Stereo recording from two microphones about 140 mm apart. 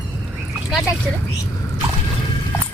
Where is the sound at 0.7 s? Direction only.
5° right (ahead or behind).